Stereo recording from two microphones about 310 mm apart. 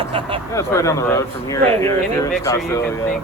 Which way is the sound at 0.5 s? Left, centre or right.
Centre.